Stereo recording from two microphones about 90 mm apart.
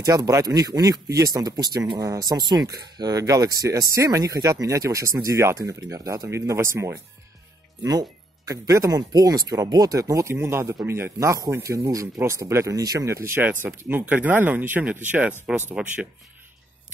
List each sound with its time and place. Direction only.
0.0 s speech: 40° right (ahead or behind)
7.8 s speech: 40° right (ahead or behind); by 16.1 s 15° right (ahead or behind)